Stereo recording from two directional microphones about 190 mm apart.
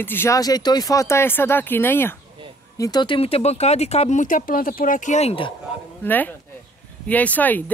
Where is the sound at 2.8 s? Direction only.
20° left (ahead or behind).